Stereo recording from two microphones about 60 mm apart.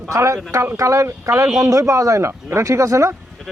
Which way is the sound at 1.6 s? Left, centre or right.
Right.